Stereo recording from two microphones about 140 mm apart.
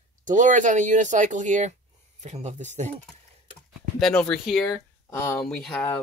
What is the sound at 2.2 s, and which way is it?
Speech, 55° right (ahead or behind).